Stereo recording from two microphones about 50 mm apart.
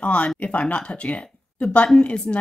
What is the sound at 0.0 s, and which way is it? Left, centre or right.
Speech, left.